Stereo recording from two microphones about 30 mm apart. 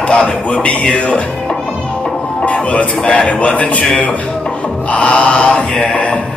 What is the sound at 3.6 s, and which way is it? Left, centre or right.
Music, left.